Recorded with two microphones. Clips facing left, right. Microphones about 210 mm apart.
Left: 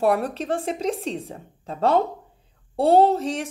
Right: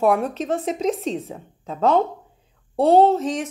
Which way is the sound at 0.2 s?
30° left (ahead or behind).